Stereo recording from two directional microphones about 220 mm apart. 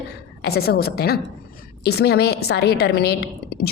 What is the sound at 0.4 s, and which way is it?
A woman's voice, 45° left (ahead or behind).